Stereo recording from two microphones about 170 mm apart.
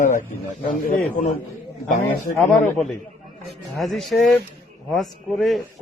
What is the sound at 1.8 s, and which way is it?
Speech, 50° left (ahead or behind).